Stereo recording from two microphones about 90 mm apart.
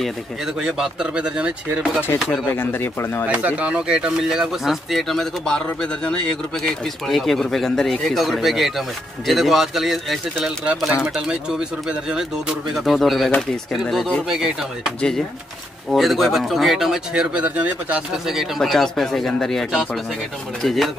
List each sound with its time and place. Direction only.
0.6 s speech: 5° right (ahead or behind)
2.3 s speech: 20° left (ahead or behind)
3.3 s speech: 15° right (ahead or behind)
15.0 s speech: 10° left (ahead or behind); by 18.0 s 15° right (ahead or behind)
18.1 s speech: 5° right (ahead or behind)